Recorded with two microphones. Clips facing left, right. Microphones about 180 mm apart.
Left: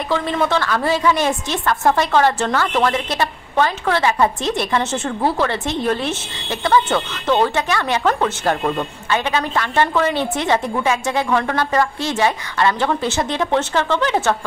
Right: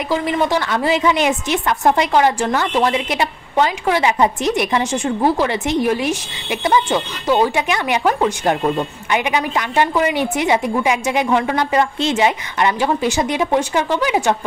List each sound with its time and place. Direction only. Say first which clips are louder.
0.1 s speech: right 1 dB; 15° right (ahead or behind)